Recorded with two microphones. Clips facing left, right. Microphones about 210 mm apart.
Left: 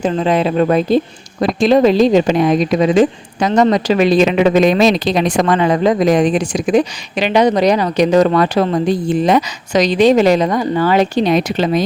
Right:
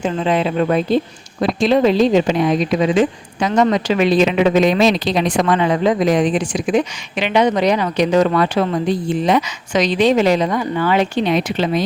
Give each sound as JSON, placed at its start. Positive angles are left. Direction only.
{"t": 0.0, "sound": "speech", "side_deg": 40}